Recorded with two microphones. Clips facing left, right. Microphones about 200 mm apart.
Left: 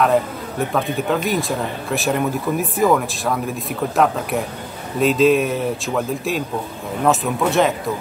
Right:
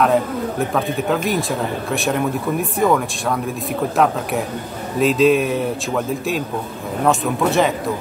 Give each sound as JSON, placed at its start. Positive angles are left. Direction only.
{"t": 0.0, "sound": "speech", "side_deg": 0}